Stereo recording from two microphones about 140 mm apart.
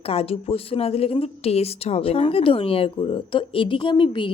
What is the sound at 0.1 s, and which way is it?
A woman's voice, 45° left (ahead or behind).